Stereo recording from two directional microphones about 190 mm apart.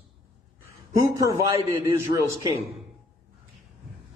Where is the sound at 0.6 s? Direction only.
15° right (ahead or behind).